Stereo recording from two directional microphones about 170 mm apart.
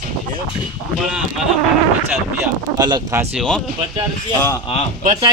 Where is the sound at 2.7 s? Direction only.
20° right (ahead or behind).